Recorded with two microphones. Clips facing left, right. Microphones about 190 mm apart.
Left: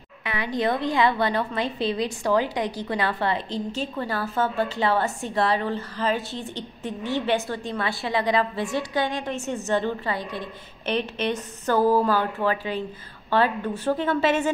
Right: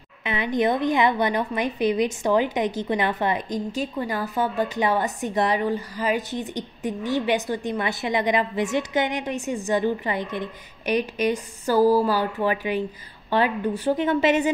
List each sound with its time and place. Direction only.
0.2 s a woman's voice: 20° right (ahead or behind)